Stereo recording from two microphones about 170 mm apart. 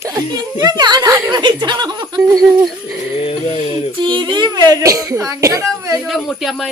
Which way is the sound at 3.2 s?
35° left (ahead or behind).